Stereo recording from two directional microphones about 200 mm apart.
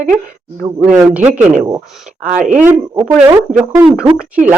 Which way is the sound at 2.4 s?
40° right (ahead or behind).